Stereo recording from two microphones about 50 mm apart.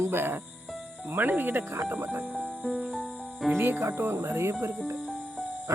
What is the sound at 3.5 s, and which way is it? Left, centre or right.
Speech, right.